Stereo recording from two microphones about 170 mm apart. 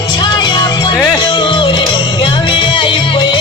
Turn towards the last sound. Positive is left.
turn(degrees=30)  # may be behind; listen again after turning